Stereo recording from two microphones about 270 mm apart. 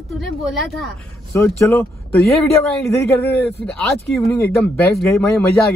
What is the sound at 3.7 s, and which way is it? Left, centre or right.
A woman's voice, centre.